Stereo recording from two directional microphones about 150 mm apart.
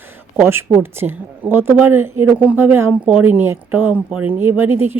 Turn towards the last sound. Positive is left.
turn(degrees=-15)  # may be behind; listen again after turning